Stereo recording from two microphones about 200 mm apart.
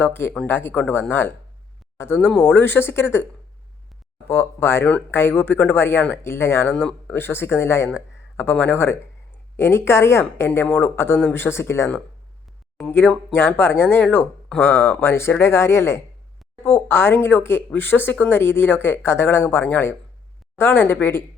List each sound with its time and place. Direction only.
0.0 s speech: 10° left (ahead or behind)
4.3 s speech: 10° left (ahead or behind)